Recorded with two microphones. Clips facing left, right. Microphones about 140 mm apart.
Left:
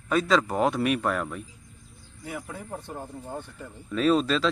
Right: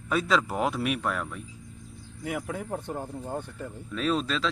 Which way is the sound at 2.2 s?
70° right (ahead or behind).